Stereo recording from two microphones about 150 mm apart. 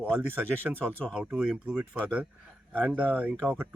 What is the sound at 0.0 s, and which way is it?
Speech, 10° right (ahead or behind).